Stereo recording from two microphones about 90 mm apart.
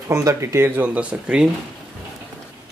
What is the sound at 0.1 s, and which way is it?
Speech, 35° right (ahead or behind).